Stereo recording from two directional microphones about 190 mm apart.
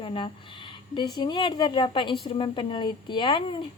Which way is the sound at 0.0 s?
25° left (ahead or behind).